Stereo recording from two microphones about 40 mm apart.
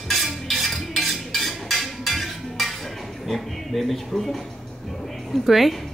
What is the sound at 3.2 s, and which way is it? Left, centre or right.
Speech, centre.